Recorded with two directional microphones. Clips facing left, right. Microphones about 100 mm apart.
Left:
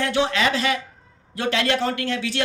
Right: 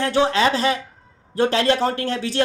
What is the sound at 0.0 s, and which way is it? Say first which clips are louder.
A man's voice: right 3 dB; 35° right (ahead or behind).